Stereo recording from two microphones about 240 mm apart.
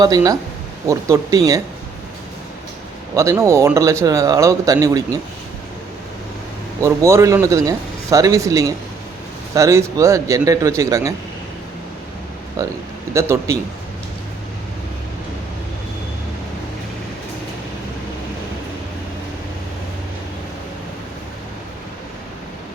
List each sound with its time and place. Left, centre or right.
0.0 s speech: centre
3.2 s speech: centre
6.8 s speech: centre
12.6 s speech: centre